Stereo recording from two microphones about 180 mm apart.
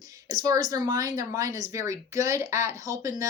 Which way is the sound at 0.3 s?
20° right (ahead or behind).